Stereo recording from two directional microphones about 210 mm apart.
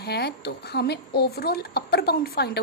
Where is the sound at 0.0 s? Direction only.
50° left (ahead or behind).